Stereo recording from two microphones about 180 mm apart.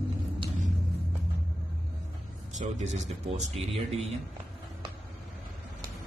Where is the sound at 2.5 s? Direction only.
40° right (ahead or behind).